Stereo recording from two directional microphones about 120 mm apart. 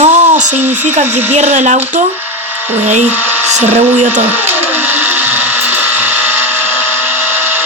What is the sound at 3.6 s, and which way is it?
Speech, 65° right (ahead or behind).